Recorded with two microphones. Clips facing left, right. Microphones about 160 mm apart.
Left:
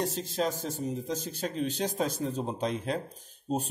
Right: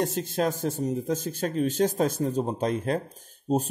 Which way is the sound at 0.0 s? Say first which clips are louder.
Right 4 dB; 55° right (ahead or behind).